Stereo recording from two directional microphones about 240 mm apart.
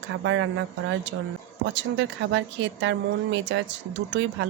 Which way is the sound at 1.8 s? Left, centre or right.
Right.